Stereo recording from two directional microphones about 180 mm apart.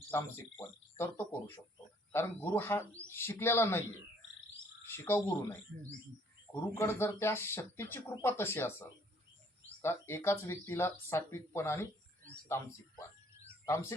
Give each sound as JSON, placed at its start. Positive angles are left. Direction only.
{"t": 0.1, "sound": "speech", "side_deg": 15}
{"t": 4.9, "sound": "speech", "side_deg": 15}